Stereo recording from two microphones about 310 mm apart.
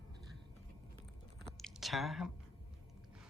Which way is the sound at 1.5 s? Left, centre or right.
Centre.